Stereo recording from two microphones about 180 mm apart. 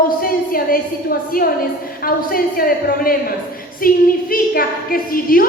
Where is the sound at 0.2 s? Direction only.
55° left (ahead or behind).